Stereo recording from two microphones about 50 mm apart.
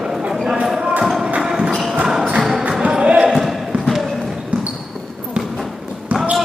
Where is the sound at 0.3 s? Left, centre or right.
Centre.